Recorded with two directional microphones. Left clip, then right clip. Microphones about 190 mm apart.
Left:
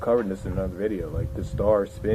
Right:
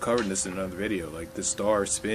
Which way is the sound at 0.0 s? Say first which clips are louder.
Left 3 dB; 15° right (ahead or behind).